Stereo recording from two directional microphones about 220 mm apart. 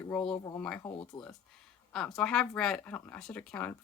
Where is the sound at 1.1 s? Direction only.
20° left (ahead or behind).